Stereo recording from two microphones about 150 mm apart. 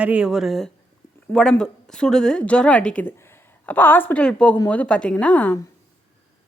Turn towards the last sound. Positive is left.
turn(degrees=10)  # may be behind; listen again after turning